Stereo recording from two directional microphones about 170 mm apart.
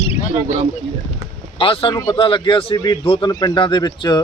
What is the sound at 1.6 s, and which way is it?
Speech, 30° left (ahead or behind).